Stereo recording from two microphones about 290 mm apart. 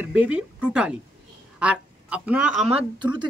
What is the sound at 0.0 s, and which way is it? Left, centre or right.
Speech, centre.